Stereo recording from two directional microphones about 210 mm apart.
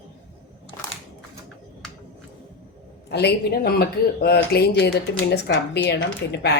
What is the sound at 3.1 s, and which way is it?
Speech, 50° left (ahead or behind).